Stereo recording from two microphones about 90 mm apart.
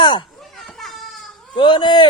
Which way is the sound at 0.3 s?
Centre (ahead or behind).